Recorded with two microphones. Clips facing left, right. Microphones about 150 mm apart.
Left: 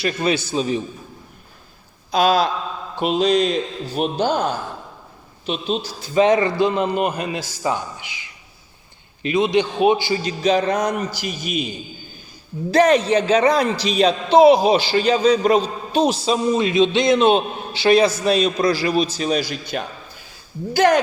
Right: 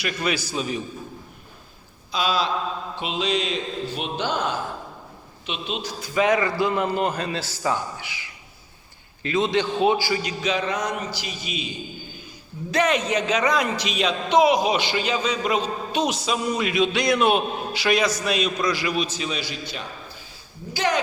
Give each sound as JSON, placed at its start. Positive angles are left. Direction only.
{"t": 0.0, "sound": "a man's voice", "side_deg": 25}
{"t": 2.1, "sound": "a man's voice", "side_deg": 45}
{"t": 12.7, "sound": "a man's voice", "side_deg": 35}